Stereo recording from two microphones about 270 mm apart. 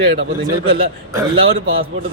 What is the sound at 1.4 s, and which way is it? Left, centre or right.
Speech, right.